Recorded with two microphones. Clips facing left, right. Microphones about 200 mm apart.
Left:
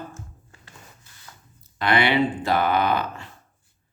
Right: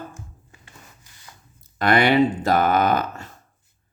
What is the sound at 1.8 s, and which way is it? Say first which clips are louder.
Speech: right 4 dB; 45° right (ahead or behind).